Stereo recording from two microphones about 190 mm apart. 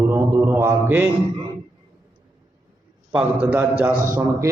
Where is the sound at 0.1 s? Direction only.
10° right (ahead or behind).